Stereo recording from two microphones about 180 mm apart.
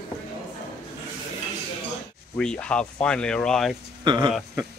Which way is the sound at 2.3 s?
5° left (ahead or behind).